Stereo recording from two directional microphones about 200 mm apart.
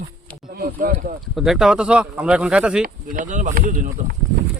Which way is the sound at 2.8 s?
40° right (ahead or behind).